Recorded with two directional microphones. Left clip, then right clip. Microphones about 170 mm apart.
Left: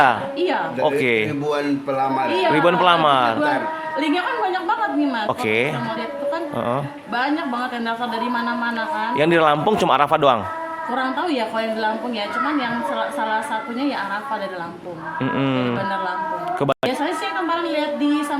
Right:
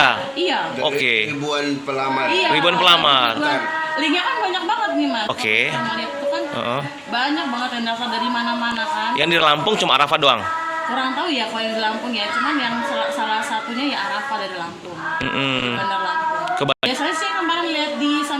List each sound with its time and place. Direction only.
0.4 s a man's voice: 20° left (ahead or behind)
1.5 s a man's voice: 80° left
2.5 s a man's voice: 25° left (ahead or behind)
9.1 s a man's voice: 25° left (ahead or behind)
15.4 s a sound: 15° left (ahead or behind)
16.6 s a woman's voice: 20° left (ahead or behind)